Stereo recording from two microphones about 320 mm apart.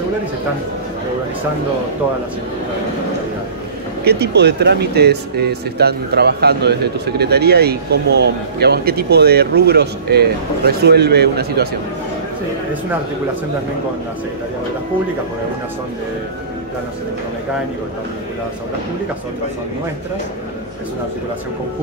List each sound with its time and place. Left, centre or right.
4.0 s speech: right